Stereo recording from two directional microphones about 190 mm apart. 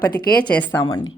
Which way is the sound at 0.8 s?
20° left (ahead or behind).